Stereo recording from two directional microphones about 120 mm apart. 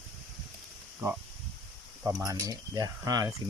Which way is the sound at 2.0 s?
20° right (ahead or behind).